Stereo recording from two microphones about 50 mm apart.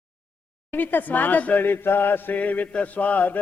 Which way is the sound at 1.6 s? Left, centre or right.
Left.